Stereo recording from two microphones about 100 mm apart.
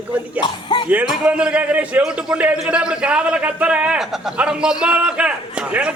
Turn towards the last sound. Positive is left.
turn(degrees=-10)  # may be behind; listen again after turning